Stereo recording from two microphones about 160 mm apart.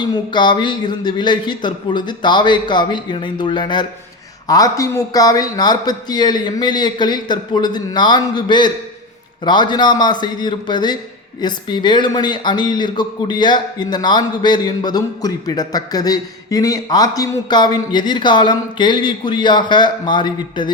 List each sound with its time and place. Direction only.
0.0 s speech: 30° left (ahead or behind)